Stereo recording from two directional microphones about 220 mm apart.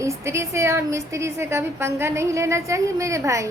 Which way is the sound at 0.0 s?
10° right (ahead or behind).